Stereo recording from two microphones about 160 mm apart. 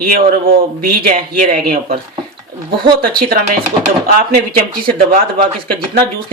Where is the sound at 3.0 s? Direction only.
70° right (ahead or behind).